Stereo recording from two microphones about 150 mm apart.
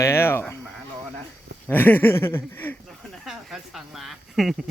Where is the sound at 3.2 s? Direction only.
Centre (ahead or behind).